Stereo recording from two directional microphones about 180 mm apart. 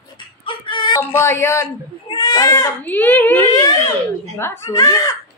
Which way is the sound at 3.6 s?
20° left (ahead or behind).